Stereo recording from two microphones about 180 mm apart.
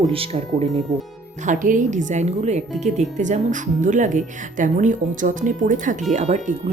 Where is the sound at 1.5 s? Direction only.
45° right (ahead or behind).